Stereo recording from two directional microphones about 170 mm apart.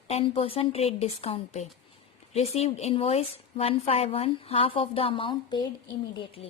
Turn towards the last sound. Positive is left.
turn(degrees=35)  # may be behind; listen again after turning